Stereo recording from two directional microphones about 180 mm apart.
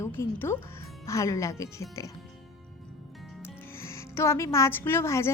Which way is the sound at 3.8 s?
15° left (ahead or behind).